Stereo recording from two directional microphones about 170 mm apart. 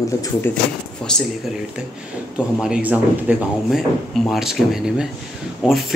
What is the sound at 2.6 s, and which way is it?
Speech, 5° right (ahead or behind).